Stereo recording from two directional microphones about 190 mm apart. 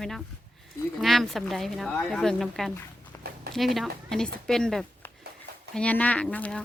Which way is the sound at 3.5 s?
Centre (ahead or behind).